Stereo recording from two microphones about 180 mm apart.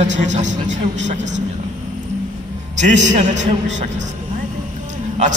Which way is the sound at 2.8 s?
40° right (ahead or behind).